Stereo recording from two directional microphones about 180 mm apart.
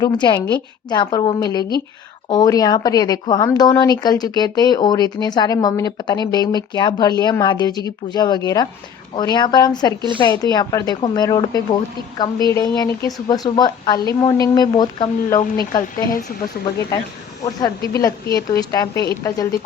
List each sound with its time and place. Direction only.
0.0 s a woman's voice: 25° left (ahead or behind)
17.4 s a woman's voice: 20° left (ahead or behind)